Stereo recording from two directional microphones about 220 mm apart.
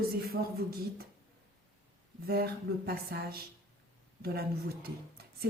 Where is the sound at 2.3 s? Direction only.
45° right (ahead or behind).